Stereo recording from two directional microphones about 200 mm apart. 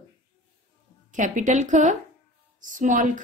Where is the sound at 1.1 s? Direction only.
40° right (ahead or behind).